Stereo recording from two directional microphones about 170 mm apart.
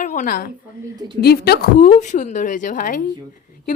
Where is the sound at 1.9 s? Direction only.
45° left (ahead or behind).